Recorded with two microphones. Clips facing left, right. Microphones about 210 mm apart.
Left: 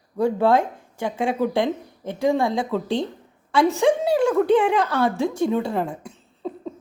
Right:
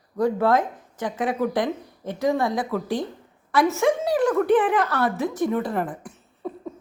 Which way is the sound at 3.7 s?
15° left (ahead or behind).